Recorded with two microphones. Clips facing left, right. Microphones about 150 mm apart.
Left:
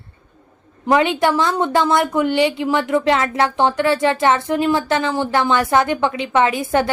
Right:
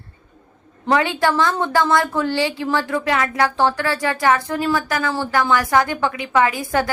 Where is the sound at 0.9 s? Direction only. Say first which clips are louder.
Left 2 dB; 20° left (ahead or behind).